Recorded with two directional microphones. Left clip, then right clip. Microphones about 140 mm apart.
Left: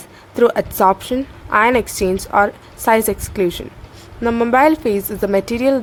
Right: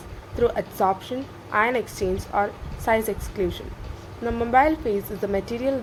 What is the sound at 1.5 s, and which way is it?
A woman's voice, 90° left.